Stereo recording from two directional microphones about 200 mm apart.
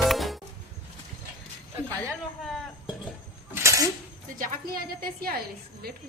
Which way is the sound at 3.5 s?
15° right (ahead or behind).